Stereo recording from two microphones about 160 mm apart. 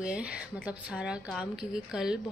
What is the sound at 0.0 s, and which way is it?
Speech, 5° right (ahead or behind).